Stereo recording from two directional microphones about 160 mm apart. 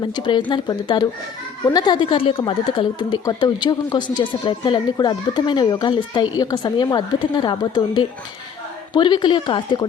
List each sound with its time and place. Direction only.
0.0 s speech: 30° left (ahead or behind)